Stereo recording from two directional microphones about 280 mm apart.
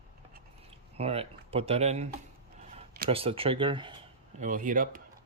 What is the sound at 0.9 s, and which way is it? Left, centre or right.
Speech, right.